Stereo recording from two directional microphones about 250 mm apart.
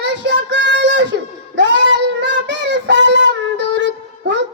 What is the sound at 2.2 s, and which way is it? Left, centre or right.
Child singing, right.